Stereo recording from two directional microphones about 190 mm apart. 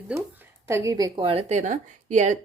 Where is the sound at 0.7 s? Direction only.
15° right (ahead or behind); by 2.4 s 40° right (ahead or behind).